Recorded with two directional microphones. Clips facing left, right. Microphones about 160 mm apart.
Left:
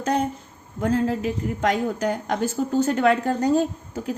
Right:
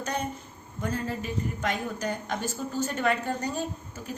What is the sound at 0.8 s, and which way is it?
A woman's voice, 90° left.